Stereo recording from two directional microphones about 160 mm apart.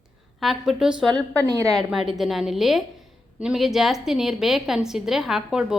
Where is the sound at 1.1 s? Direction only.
10° left (ahead or behind).